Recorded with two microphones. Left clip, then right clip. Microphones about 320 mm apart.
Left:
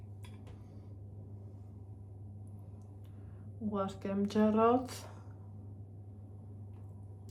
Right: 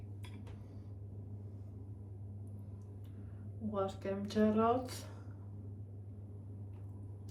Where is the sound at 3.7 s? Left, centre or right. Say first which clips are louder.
Even; left.